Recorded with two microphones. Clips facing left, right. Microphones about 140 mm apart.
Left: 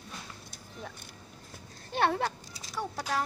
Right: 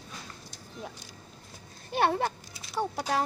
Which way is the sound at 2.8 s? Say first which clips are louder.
Right 5 dB; 20° right (ahead or behind).